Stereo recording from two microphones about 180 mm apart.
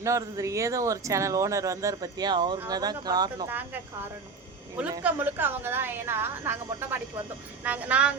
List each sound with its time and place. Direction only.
0.0 s speech: 15° right (ahead or behind)
4.9 s speech: 10° right (ahead or behind)